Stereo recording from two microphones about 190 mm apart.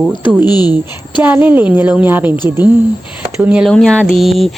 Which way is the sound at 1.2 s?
10° right (ahead or behind).